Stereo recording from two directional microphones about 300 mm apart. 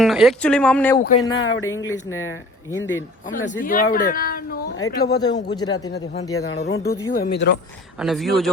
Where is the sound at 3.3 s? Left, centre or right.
Left.